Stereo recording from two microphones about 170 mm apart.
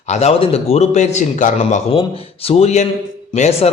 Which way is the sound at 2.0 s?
35° left (ahead or behind).